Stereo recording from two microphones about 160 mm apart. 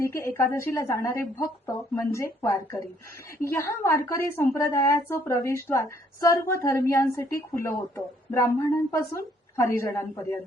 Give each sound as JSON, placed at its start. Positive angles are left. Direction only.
{"t": 0.0, "sound": "a woman's voice", "side_deg": 20}